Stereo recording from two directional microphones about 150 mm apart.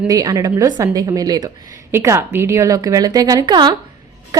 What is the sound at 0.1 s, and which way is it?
A woman's voice, 25° right (ahead or behind).